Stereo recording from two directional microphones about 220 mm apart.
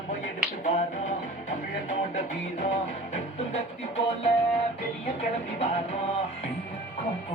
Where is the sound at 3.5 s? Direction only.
30° left (ahead or behind).